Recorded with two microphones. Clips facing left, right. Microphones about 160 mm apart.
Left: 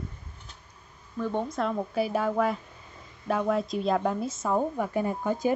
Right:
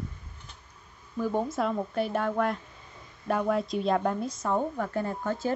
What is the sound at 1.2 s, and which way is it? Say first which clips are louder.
A woman's voice: right 1 dB; 5° right (ahead or behind).